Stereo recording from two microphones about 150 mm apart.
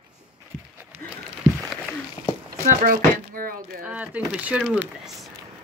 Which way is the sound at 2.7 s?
65° right (ahead or behind).